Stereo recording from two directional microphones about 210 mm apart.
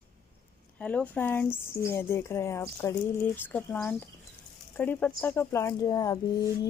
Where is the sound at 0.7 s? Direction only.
5° left (ahead or behind).